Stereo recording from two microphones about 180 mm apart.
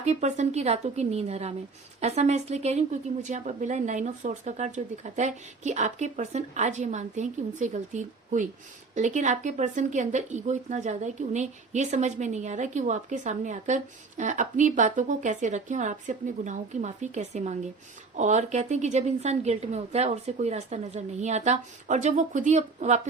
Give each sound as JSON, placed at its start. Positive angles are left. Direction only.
{"t": 0.0, "sound": "speech", "side_deg": -40}